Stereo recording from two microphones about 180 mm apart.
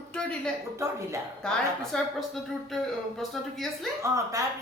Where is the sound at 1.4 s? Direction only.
5° left (ahead or behind).